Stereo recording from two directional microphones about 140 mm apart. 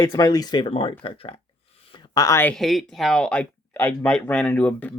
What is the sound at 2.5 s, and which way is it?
Speech, centre (ahead or behind).